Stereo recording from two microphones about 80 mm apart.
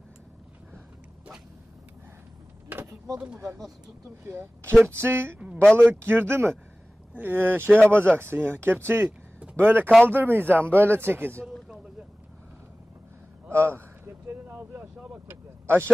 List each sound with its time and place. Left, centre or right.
2.7 s vehicle: right
4.2 s speech: right
5.6 s speech: centre
5.9 s speech: right
13.5 s vehicle: right